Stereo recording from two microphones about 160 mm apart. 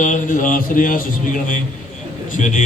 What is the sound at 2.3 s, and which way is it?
Speech, 50° left (ahead or behind).